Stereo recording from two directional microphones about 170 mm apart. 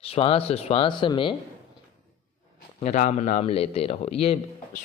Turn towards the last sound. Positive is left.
turn(degrees=35)  # may be behind; listen again after turning